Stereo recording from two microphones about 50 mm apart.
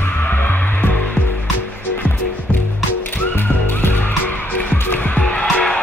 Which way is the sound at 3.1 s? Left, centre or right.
Left.